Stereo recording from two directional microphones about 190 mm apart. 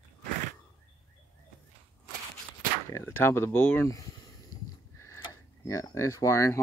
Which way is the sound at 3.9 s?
15° left (ahead or behind).